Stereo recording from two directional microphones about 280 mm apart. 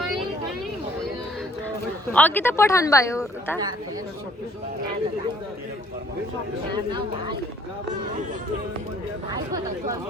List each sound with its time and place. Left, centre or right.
2.1 s speech: centre
6.7 s speech: centre